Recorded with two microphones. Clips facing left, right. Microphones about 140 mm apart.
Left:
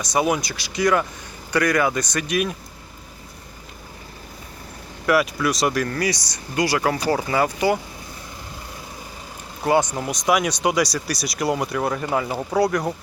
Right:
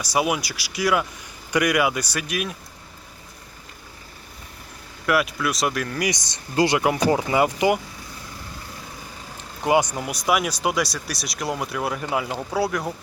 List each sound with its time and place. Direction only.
0.0 s speech: 5° right (ahead or behind)
5.0 s speech: centre (ahead or behind)
6.0 s speech: 20° right (ahead or behind)
9.6 s speech: 10° right (ahead or behind)
12.3 s speech: 10° left (ahead or behind)
12.5 s speech: 5° right (ahead or behind)